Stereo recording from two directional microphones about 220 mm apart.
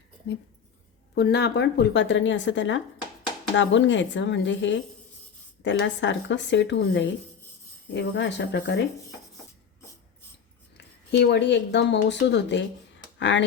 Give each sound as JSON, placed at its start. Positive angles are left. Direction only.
{"t": 1.1, "sound": "speech", "side_deg": 50}
{"t": 10.8, "sound": "speech", "side_deg": 50}